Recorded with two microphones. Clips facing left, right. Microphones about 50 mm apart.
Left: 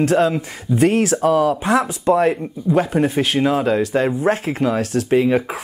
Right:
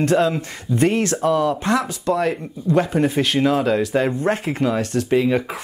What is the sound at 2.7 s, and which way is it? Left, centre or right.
Speech, centre.